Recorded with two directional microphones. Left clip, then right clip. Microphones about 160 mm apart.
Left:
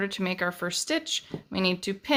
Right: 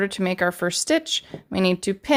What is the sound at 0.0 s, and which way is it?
Speech, 40° right (ahead or behind).